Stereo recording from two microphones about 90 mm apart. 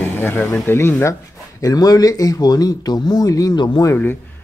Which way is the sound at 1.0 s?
40° left (ahead or behind).